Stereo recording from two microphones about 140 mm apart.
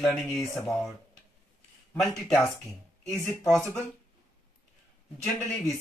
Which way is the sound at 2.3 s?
5° left (ahead or behind).